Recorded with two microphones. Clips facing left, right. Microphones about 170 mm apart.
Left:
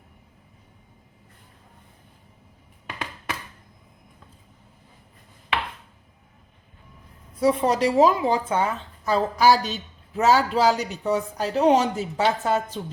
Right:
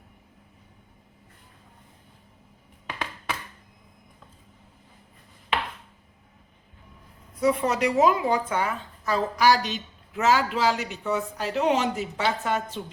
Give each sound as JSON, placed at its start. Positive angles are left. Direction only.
{"t": 7.3, "sound": "a man's voice", "side_deg": 30}